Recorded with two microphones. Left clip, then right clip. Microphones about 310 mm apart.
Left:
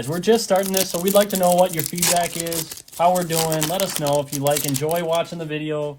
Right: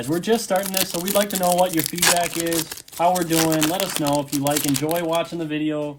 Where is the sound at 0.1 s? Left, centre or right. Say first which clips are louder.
Left 3 dB; left.